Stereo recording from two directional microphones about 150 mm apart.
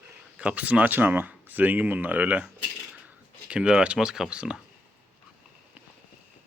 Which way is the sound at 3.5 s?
5° right (ahead or behind).